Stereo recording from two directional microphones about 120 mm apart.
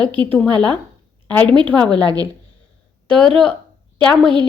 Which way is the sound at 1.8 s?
35° right (ahead or behind).